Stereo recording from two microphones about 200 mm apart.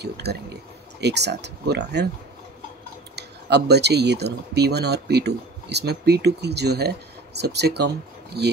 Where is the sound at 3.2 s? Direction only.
55° right (ahead or behind).